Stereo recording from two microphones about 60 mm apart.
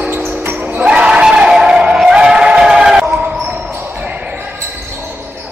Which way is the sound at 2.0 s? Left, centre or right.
Centre.